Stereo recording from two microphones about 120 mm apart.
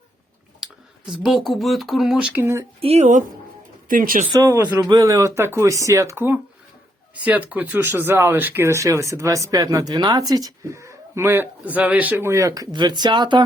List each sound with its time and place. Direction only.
1.1 s speech: 5° right (ahead or behind)
2.4 s speech: 25° right (ahead or behind)
2.8 s speech: 65° right (ahead or behind)
4.4 s speech: 15° right (ahead or behind)
4.8 s speech: 30° right (ahead or behind)
12.7 s speech: 40° right (ahead or behind)